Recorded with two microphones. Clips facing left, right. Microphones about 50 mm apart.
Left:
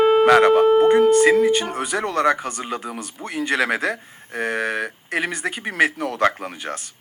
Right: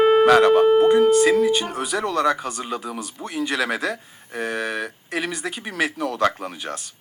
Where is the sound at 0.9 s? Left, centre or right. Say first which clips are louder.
Left 1 dB; left.